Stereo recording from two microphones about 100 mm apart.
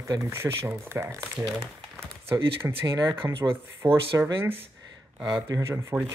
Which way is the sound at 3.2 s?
35° right (ahead or behind).